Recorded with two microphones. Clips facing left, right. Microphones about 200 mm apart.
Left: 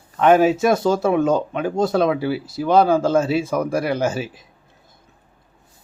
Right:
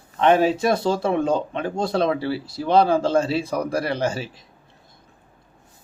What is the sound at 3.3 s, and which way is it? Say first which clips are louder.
Speech: left 3 dB; centre (ahead or behind).